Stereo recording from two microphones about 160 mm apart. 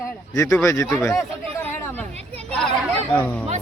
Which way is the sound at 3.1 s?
10° left (ahead or behind).